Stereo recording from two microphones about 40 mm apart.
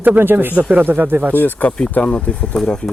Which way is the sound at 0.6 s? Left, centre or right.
Right.